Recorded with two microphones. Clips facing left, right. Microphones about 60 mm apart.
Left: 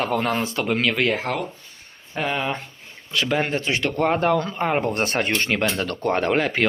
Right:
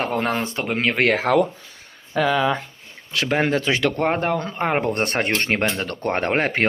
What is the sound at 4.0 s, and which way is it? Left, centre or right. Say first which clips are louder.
Speech: left 1 dB; right.